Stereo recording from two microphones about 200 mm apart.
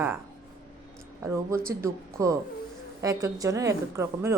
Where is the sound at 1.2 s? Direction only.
15° right (ahead or behind).